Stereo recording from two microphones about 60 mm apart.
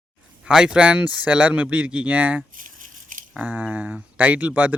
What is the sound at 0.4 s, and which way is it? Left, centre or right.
Speech, centre.